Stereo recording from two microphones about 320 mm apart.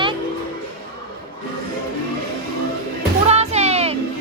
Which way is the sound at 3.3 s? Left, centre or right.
Centre.